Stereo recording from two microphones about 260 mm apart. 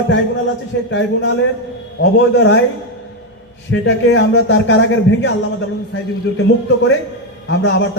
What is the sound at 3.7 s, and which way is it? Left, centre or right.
A man's voice, left.